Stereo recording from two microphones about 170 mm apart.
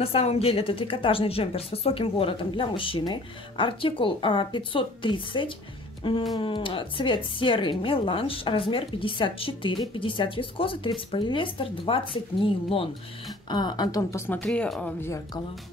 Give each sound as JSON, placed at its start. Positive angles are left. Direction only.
{"t": 0.0, "sound": "a woman's voice", "side_deg": 35}